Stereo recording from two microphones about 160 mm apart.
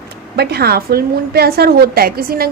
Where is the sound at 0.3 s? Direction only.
85° right.